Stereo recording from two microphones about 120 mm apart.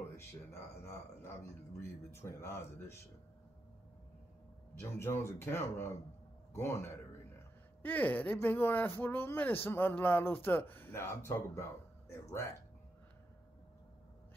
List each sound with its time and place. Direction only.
0.1 s speech: 25° left (ahead or behind)
4.7 s speech: 20° left (ahead or behind)